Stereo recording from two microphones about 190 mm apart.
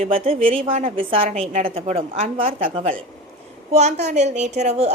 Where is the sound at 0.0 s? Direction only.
30° right (ahead or behind).